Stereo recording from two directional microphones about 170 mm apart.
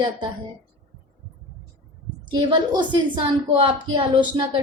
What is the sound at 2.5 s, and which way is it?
A woman's voice, 25° right (ahead or behind).